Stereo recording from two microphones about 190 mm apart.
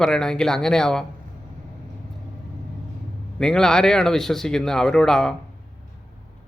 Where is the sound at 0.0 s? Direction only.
5° left (ahead or behind).